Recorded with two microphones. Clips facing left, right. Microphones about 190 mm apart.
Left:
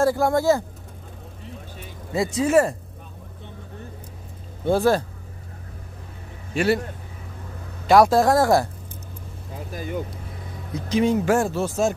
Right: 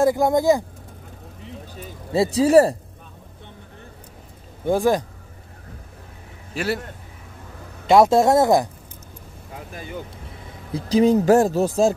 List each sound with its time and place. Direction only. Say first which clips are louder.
0.0 s speech: right 2 dB; 15° right (ahead or behind)
2.1 s speech: right 4 dB; 35° right (ahead or behind)
4.6 s speech: even; 15° right (ahead or behind)
6.5 s a man's voice: left 4 dB; centre (ahead or behind)
7.8 s speech: right 1 dB; 25° right (ahead or behind)
10.7 s speech: right 4 dB; 35° right (ahead or behind)